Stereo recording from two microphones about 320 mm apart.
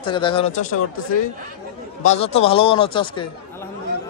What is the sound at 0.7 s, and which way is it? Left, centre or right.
Speech, left.